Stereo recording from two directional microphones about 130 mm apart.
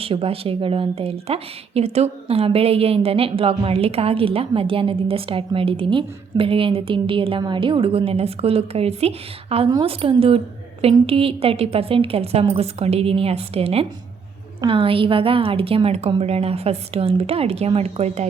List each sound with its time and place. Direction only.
0.0 s speech: 45° right (ahead or behind)